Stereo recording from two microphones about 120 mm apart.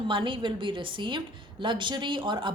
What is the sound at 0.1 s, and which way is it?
Speech, 45° right (ahead or behind).